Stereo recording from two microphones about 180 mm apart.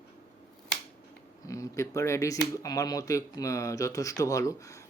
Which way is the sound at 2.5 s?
20° left (ahead or behind).